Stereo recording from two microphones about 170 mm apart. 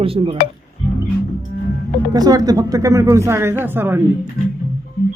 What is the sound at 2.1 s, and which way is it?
Speech, 20° right (ahead or behind).